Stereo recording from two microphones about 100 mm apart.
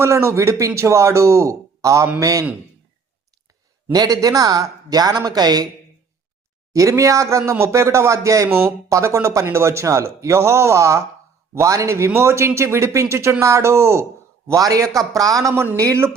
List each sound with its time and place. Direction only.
0.0 s speech: 30° right (ahead or behind)
3.9 s speech: 40° right (ahead or behind)
6.7 s speech: 30° right (ahead or behind)